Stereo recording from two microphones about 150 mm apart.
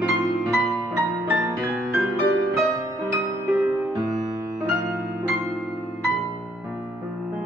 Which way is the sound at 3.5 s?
10° right (ahead or behind).